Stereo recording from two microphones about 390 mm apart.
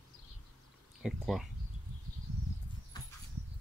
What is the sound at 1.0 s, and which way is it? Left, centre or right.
Speech, centre.